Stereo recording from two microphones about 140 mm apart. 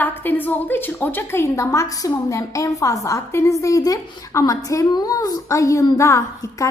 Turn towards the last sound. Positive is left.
turn(degrees=20)  # may be behind; listen again after turning